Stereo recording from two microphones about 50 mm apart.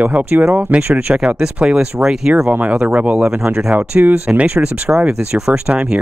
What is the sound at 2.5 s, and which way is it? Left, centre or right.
Speech, right.